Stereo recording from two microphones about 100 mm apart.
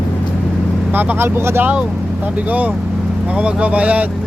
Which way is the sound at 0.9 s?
20° right (ahead or behind).